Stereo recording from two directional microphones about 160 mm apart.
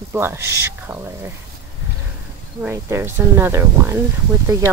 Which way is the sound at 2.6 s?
15° right (ahead or behind).